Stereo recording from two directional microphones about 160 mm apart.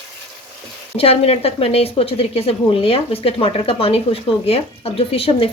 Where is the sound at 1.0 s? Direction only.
40° left (ahead or behind).